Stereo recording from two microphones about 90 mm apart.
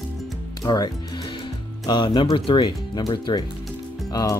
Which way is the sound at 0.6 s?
50° left (ahead or behind).